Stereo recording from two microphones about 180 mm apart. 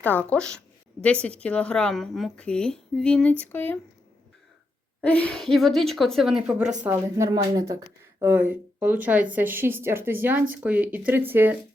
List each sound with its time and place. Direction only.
0.0 s a woman's voice: 10° left (ahead or behind)
4.9 s a woman's voice: 5° left (ahead or behind)
6.6 s speech: 40° right (ahead or behind)
6.8 s speech: 20° right (ahead or behind)